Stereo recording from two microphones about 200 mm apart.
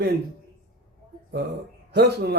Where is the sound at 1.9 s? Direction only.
55° right (ahead or behind).